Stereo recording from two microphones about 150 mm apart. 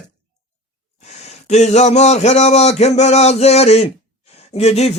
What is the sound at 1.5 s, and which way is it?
Speech, 50° left (ahead or behind).